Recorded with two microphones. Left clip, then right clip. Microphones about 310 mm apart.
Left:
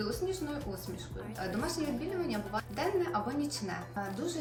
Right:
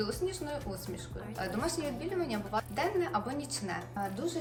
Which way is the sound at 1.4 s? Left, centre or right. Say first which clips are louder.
Right 1 dB; centre.